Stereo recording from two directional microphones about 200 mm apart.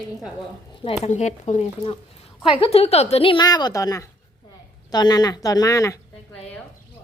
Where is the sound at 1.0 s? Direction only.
35° left (ahead or behind); by 6.0 s 15° left (ahead or behind).